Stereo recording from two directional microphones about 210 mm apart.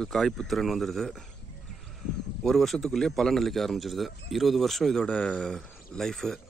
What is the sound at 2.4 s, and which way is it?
A man's voice, centre (ahead or behind).